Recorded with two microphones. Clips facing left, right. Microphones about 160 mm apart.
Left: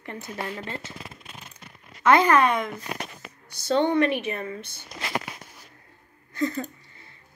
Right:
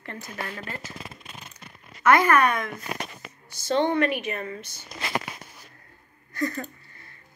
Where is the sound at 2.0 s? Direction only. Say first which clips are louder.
Left 1 dB; 20° left (ahead or behind).